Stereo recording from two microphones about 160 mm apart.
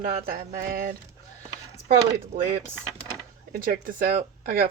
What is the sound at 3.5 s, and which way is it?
Speech, 65° right (ahead or behind).